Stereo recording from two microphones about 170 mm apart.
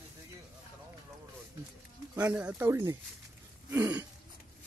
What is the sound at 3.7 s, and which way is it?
Speech, 15° right (ahead or behind).